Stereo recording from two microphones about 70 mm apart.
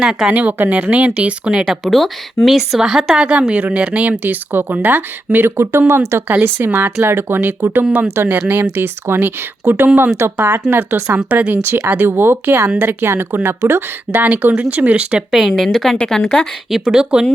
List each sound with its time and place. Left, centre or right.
0.0 s speech: centre
0.3 s speech: right
1.6 s a woman's voice: centre
3.2 s speech: centre
4.2 s speech: right
11.6 s speech: right
15.3 s a woman's voice: centre